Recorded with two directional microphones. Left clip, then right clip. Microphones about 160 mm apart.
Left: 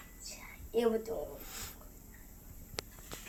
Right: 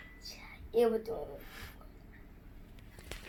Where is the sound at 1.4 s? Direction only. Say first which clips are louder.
Left 2 dB; 25° left (ahead or behind).